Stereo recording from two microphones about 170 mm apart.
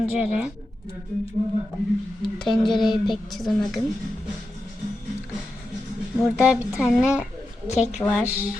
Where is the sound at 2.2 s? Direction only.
Centre (ahead or behind).